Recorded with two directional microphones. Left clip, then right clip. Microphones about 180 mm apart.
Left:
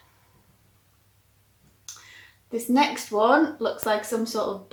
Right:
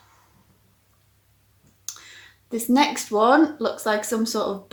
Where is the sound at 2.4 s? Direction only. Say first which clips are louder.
Right 2 dB; 45° right (ahead or behind).